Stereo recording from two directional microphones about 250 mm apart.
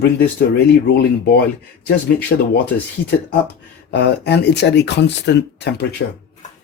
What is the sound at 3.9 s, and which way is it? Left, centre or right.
Speech, left.